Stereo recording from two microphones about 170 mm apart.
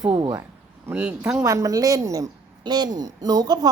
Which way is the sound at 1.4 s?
20° right (ahead or behind).